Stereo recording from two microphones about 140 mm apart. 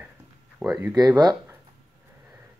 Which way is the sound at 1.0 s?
30° right (ahead or behind).